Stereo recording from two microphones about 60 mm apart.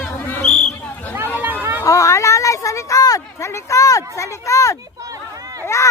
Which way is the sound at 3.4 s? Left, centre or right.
Left.